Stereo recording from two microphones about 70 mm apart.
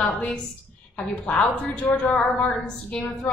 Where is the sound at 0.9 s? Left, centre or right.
Centre.